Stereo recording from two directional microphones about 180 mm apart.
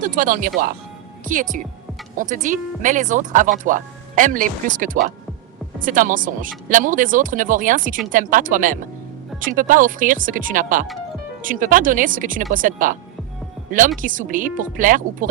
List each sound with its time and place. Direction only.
0.0 s speech: 45° right (ahead or behind)